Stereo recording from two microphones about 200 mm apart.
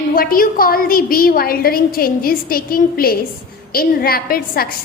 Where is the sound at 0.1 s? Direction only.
45° left (ahead or behind).